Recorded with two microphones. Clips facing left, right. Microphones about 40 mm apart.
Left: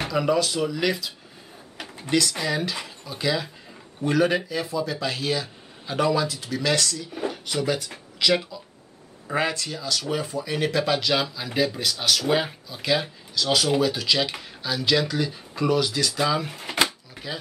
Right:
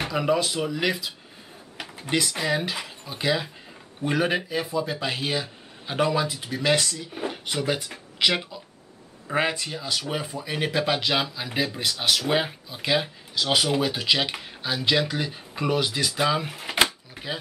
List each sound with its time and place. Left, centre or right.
0.0 s speech: centre
1.8 s a sound: centre
2.0 s speech: centre
16.5 s drawer open or close: centre